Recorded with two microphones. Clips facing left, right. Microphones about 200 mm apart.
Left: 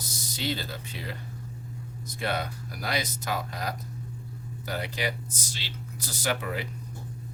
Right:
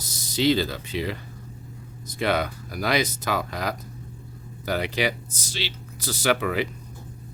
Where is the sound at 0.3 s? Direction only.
90° right.